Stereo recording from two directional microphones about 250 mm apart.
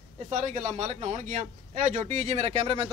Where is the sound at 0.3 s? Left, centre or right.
Right.